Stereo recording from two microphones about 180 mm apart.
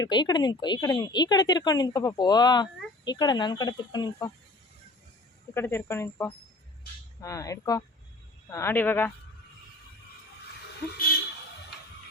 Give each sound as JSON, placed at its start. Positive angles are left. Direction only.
{"t": 0.0, "sound": "speech", "side_deg": 25}
{"t": 5.5, "sound": "speech", "side_deg": 15}